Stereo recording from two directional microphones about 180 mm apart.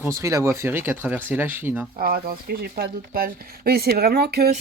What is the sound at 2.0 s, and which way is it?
Speech, 55° right (ahead or behind).